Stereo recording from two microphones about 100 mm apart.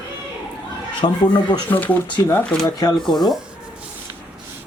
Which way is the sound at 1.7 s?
15° left (ahead or behind).